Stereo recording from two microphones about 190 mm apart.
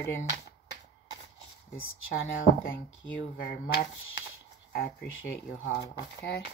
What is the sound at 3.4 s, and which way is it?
Speech, 50° left (ahead or behind).